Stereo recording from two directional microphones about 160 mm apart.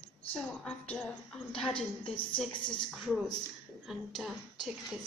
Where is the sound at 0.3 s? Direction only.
5° left (ahead or behind).